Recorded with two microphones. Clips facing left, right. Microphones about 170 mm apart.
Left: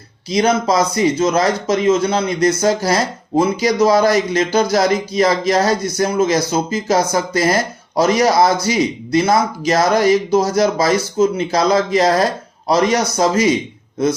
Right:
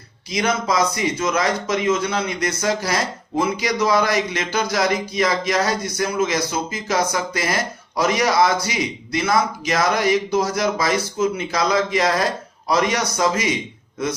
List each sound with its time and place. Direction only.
0.3 s speech: 35° left (ahead or behind)